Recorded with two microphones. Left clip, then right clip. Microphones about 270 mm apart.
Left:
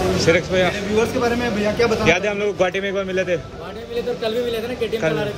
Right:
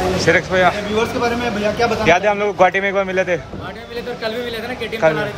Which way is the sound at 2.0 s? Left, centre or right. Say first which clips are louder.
Right 4 dB; right.